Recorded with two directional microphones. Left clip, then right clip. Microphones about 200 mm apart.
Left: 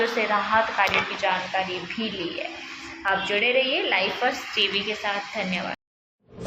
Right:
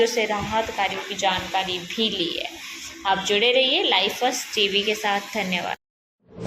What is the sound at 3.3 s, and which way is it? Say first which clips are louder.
A woman's voice: right 4 dB; 55° right (ahead or behind).